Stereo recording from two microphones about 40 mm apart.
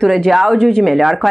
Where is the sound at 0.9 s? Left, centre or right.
Centre.